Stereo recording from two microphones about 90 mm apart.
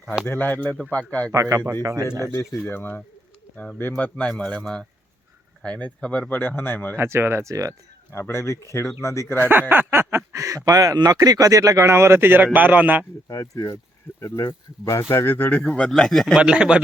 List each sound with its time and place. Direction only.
0.3 s speech: 20° left (ahead or behind)
1.3 s speech: 40° right (ahead or behind)
2.2 s speech: 30° left (ahead or behind)
2.6 s speech: 20° left (ahead or behind)
4.3 s speech: 10° left (ahead or behind)
6.9 s speech: 30° right (ahead or behind)
8.1 s speech: 30° left (ahead or behind)
9.4 s a man's voice: 20° right (ahead or behind)
13.2 s speech: 40° left (ahead or behind); by 16.4 s centre (ahead or behind)
16.4 s speech: 10° right (ahead or behind)